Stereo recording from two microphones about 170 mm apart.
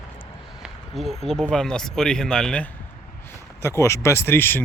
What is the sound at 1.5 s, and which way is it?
Speech, 5° left (ahead or behind).